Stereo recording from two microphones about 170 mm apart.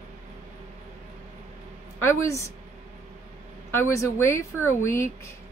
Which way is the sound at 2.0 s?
15° left (ahead or behind).